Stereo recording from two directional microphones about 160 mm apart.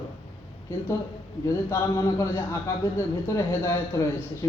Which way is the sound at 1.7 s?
20° left (ahead or behind).